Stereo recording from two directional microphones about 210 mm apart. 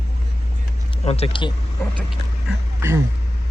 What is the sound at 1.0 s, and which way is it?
Speech, 30° left (ahead or behind).